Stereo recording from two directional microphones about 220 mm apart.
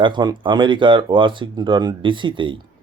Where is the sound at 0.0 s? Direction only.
20° right (ahead or behind).